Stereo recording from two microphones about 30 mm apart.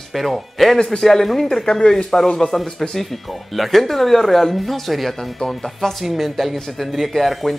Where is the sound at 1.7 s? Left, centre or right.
Left.